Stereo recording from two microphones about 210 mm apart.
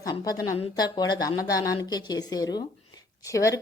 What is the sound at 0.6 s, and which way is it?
Speech, 20° left (ahead or behind).